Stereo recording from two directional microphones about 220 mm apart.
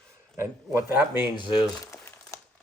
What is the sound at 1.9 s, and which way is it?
Crumpling, 10° left (ahead or behind).